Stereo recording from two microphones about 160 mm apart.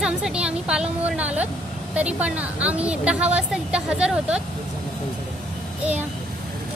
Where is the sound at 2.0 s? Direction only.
10° right (ahead or behind).